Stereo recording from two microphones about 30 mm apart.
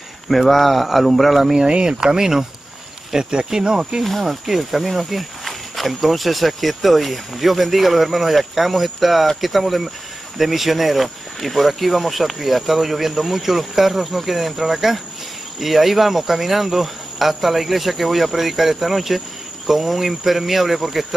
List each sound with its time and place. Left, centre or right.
0.3 s speech: centre
1.4 s speech: centre
1.7 s speech: right
4.0 s speech: centre
4.3 s speech: centre
4.8 s speech: centre